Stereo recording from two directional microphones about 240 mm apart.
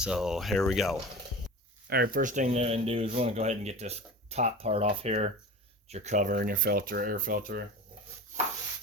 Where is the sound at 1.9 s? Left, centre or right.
Right.